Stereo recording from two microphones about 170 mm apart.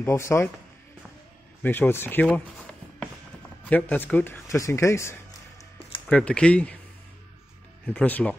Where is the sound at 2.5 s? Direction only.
5° left (ahead or behind).